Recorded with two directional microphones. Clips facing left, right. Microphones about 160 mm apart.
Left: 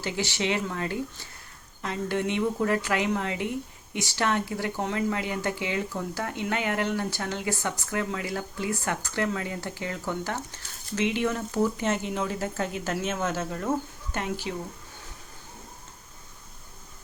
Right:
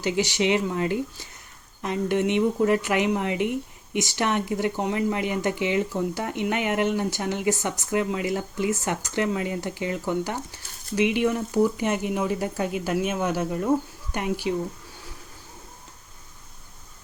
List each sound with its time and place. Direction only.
0.0 s speech: 15° right (ahead or behind)